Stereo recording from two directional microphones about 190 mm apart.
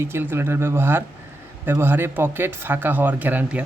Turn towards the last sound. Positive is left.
turn(degrees=-10)  # may be behind; listen again after turning